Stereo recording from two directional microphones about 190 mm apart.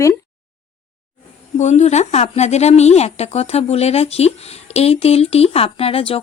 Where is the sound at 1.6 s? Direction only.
35° left (ahead or behind).